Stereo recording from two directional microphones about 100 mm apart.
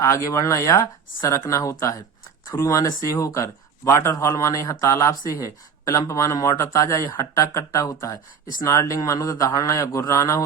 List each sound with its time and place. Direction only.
0.0 s speech: 35° left (ahead or behind)